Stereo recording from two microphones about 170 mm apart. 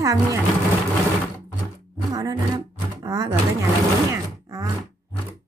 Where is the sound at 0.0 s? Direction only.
20° right (ahead or behind).